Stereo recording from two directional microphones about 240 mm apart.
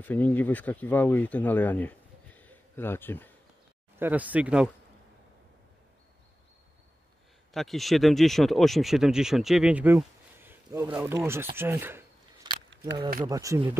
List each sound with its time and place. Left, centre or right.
0.0 s speech: centre
4.0 s speech: centre
7.5 s speech: centre
12.4 s a sound: centre
13.2 s speech: centre